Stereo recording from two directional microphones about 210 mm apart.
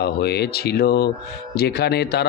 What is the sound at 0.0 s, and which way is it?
A man's voice, 50° left (ahead or behind).